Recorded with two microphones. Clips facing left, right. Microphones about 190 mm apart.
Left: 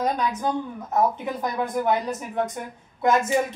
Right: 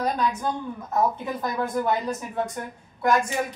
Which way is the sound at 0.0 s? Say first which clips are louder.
Left 1 dB; 20° left (ahead or behind).